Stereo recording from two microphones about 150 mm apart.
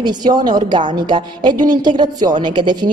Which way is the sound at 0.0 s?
25° right (ahead or behind).